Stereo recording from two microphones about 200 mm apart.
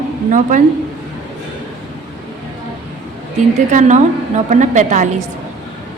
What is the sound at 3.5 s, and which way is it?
A woman's voice, 35° right (ahead or behind).